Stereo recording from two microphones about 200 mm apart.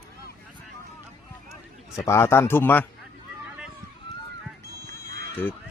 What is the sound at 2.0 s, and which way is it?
Speech, 15° left (ahead or behind).